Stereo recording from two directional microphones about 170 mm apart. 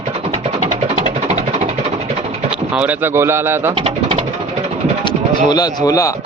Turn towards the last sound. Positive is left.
turn(degrees=20)  # may be behind; listen again after turning